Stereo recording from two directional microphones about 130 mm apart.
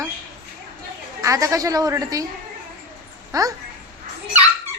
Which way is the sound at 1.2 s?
25° right (ahead or behind).